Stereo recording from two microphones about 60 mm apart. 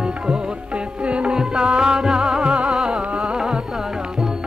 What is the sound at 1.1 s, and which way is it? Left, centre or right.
Music, centre.